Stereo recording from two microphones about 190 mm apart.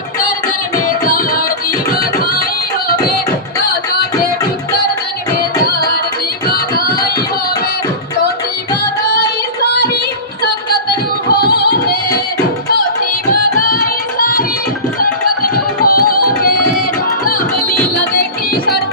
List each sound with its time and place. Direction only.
0.9 s music: 45° left (ahead or behind)
5.4 s music: 50° left (ahead or behind)
11.3 s music: 55° left (ahead or behind)
14.2 s music: 50° left (ahead or behind)